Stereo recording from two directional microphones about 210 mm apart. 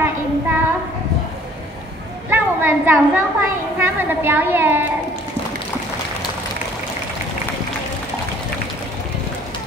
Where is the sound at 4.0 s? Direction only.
10° right (ahead or behind).